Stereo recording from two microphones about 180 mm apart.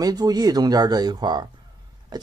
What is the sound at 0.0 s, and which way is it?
Speech, 20° right (ahead or behind).